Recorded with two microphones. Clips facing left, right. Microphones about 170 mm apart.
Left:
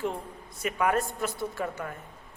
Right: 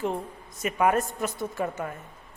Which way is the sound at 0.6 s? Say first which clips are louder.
Right 3 dB; 20° right (ahead or behind).